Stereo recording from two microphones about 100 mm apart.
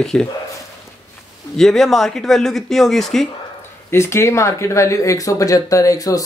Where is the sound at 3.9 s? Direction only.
25° left (ahead or behind).